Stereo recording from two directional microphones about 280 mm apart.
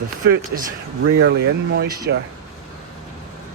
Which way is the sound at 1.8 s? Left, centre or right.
Right.